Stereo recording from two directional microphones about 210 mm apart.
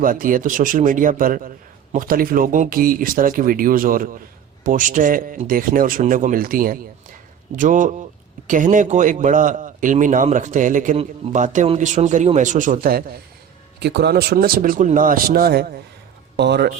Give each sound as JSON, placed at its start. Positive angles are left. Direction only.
{"t": 0.0, "sound": "a man's voice", "side_deg": -40}